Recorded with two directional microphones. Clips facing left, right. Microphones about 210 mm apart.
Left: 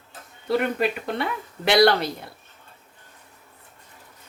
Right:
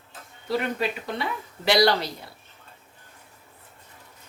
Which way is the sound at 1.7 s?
55° left (ahead or behind).